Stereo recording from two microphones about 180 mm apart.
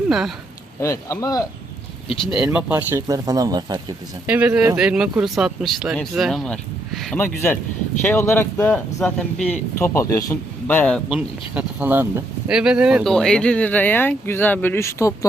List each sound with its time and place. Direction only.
0.1 s speech: centre (ahead or behind)
0.8 s speech: 15° left (ahead or behind)
2.2 s speech: 5° right (ahead or behind); by 3.8 s 20° right (ahead or behind)
4.3 s speech: 10° right (ahead or behind)
8.0 s speech: 15° left (ahead or behind)
11.2 s speech: 10° right (ahead or behind); by 15.3 s 15° left (ahead or behind)